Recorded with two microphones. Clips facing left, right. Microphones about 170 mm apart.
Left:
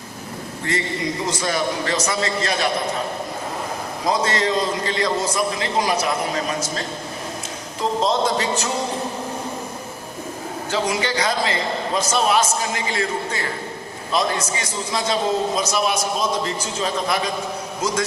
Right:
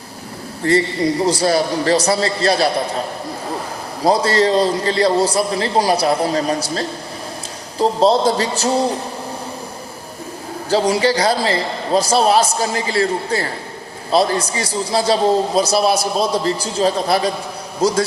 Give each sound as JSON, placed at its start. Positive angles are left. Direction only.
{"t": 0.6, "sound": "a man's voice", "side_deg": -35}
{"t": 4.0, "sound": "a man's voice", "side_deg": -35}
{"t": 10.7, "sound": "a man's voice", "side_deg": -35}